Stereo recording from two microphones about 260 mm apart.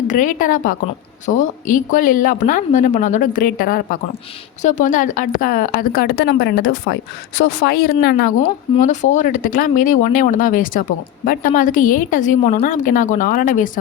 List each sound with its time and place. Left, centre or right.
0.1 s a woman's voice: left